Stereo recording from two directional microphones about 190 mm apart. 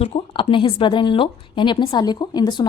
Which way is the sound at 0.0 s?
35° left (ahead or behind).